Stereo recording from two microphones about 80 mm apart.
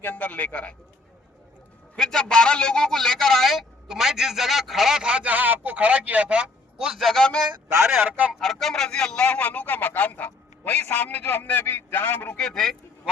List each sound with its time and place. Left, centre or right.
0.0 s a man's voice: left
2.0 s a man's voice: centre
8.0 s speech: centre
8.3 s a man's voice: centre; by 12.4 s left
12.4 s speech: centre